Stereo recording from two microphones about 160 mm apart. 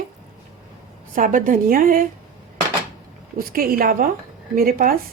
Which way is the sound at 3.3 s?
65° right (ahead or behind).